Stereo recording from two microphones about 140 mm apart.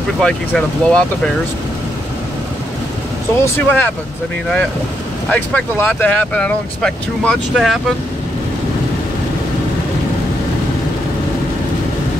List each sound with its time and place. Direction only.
0.2 s speech: 5° left (ahead or behind)
3.3 s speech: 15° left (ahead or behind)
5.3 s speech: 15° left (ahead or behind)